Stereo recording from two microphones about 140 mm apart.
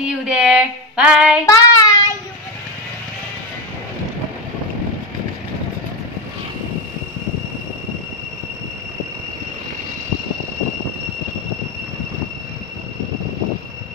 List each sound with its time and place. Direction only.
0.0 s a woman's voice: 5° right (ahead or behind)
1.4 s child singing: 25° left (ahead or behind)